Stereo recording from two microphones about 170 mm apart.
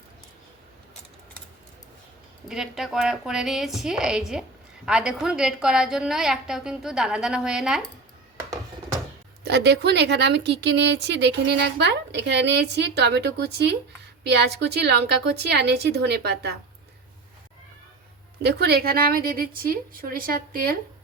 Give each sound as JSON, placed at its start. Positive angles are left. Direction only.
{"t": 2.5, "sound": "a woman's voice", "side_deg": 0}
{"t": 9.4, "sound": "a woman's voice", "side_deg": -80}
{"t": 18.4, "sound": "a woman's voice", "side_deg": -70}